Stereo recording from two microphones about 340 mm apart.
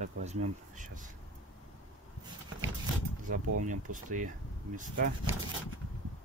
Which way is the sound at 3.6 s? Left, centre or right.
Right.